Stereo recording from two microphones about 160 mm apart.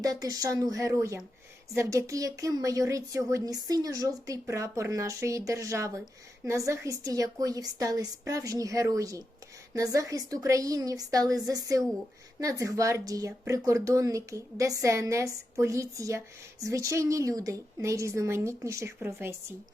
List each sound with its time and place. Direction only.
0.0 s a woman's voice: 20° right (ahead or behind)